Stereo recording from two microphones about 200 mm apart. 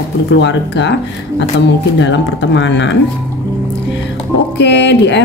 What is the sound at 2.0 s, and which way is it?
Speech, 65° left (ahead or behind).